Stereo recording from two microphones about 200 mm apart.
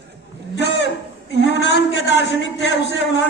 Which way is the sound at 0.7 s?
60° left (ahead or behind).